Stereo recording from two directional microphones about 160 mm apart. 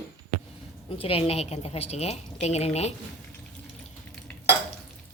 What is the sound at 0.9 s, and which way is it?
A woman's voice, 35° left (ahead or behind).